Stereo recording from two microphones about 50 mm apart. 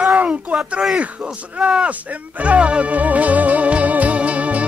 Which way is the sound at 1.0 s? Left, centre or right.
Right.